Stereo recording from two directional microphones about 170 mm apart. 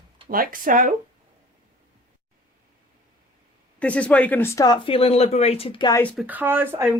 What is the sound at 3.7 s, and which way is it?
Speech, 5° left (ahead or behind).